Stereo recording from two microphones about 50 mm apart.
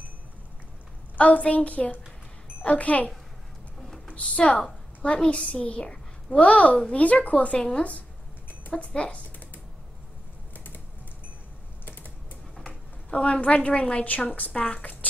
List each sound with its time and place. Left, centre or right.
1.1 s a woman's voice: left
4.1 s speech: left
4.6 s a sound: centre
5.1 s a woman's voice: left
10.5 s typing: left
11.8 s typing: left
13.1 s a woman's voice: left